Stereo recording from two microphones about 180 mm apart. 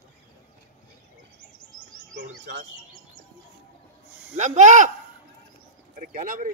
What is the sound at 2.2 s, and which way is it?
Bird, 65° right (ahead or behind).